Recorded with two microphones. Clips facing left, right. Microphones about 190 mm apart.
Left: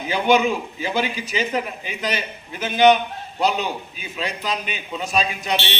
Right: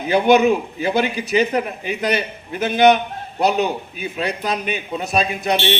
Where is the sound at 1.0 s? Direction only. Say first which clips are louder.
Right 6 dB; 55° right (ahead or behind).